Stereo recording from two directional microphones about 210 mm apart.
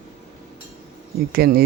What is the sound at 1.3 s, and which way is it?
Speech, 50° right (ahead or behind).